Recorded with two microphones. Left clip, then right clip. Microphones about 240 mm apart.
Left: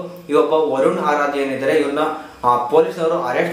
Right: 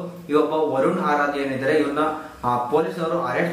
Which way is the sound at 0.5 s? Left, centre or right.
Centre.